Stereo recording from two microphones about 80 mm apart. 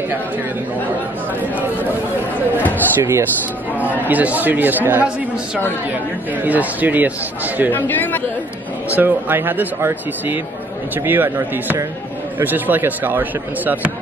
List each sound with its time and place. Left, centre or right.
2.7 s speech: right
3.7 s speech: right
7.7 s speech: left
8.9 s speech: right